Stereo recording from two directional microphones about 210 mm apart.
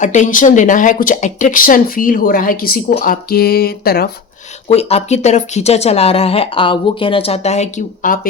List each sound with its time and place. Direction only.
0.0 s speech: 35° left (ahead or behind)
4.7 s speech: 30° left (ahead or behind)